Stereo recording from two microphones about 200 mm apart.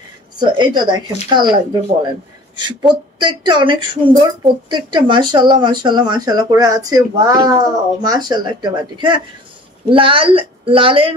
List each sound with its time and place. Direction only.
0.4 s speech: 20° right (ahead or behind)
3.2 s speech: 25° right (ahead or behind)